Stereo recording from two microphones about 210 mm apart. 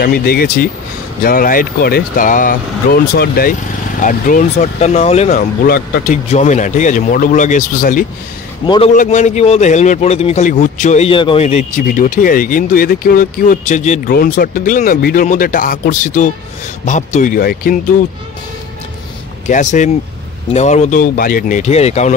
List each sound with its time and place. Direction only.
0.0 s speech: 45° left (ahead or behind)
6.2 s speech: 35° left (ahead or behind)
8.6 s a man's voice: 25° left (ahead or behind)
8.9 s speech: 35° left (ahead or behind)
19.4 s speech: 35° left (ahead or behind)